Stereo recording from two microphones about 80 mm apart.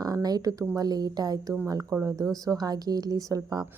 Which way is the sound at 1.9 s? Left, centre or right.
Right.